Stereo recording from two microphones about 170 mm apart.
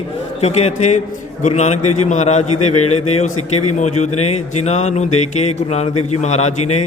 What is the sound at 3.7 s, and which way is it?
A man's voice, 40° left (ahead or behind).